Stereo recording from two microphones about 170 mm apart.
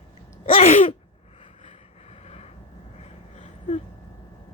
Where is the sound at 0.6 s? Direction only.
40° left (ahead or behind).